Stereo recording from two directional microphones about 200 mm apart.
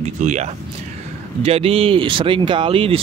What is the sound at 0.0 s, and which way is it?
Speech, 35° right (ahead or behind).